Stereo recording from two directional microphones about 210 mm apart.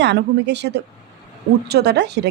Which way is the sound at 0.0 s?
55° right (ahead or behind).